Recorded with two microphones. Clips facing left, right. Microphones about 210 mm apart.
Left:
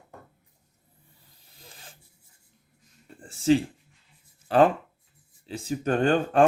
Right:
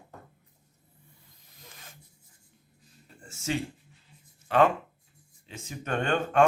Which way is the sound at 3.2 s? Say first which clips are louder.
Left 10 dB; 35° left (ahead or behind).